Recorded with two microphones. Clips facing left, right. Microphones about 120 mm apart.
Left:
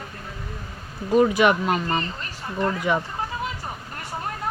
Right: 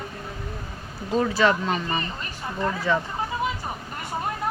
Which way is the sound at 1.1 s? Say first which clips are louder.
Left 4 dB; 15° left (ahead or behind).